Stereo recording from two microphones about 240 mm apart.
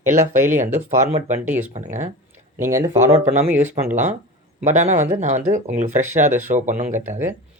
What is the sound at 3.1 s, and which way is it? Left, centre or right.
Speech, right.